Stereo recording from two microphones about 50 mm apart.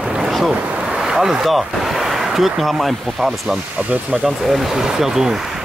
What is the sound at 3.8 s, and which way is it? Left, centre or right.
Speech, right.